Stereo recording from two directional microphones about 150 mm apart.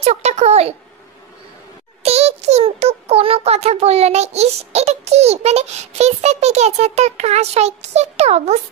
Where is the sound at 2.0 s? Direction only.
45° right (ahead or behind).